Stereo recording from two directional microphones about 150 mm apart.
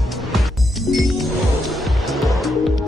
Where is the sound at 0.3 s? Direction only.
Centre (ahead or behind).